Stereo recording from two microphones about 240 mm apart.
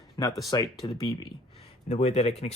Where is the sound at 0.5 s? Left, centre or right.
Centre.